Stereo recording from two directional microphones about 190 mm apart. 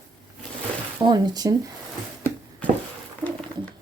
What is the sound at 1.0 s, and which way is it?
Speech, 20° right (ahead or behind).